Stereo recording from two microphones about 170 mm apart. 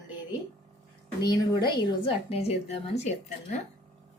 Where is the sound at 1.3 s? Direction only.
25° left (ahead or behind); by 3.6 s 40° left (ahead or behind).